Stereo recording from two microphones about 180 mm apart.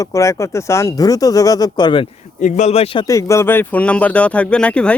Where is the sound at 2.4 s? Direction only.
40° left (ahead or behind).